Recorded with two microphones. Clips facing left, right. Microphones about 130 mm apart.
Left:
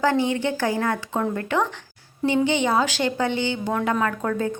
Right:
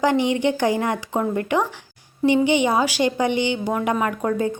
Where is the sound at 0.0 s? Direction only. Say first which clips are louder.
Right 2 dB; 15° right (ahead or behind).